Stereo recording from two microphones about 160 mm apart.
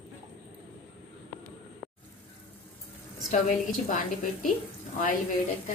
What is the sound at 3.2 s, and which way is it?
Speech, 55° left (ahead or behind).